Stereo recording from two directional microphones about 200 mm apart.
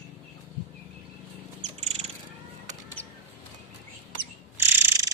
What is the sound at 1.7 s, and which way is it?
Bird, 35° right (ahead or behind).